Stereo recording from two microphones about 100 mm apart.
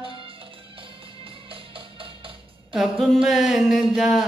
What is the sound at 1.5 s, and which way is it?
Music, 60° right (ahead or behind).